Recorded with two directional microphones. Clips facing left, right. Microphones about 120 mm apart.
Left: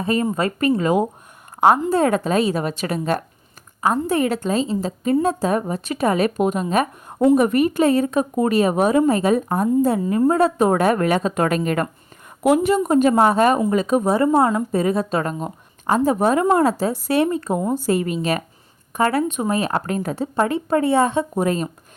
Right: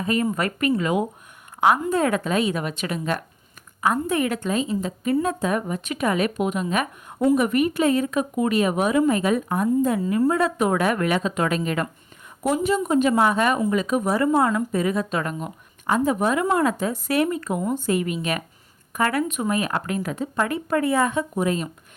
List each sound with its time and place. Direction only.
0.0 s a woman's voice: 35° left (ahead or behind)
12.4 s a woman's voice: 65° left (ahead or behind)
12.8 s a woman's voice: 45° left (ahead or behind)